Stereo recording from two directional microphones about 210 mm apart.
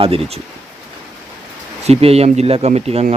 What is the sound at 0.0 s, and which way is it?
Speech, 25° right (ahead or behind).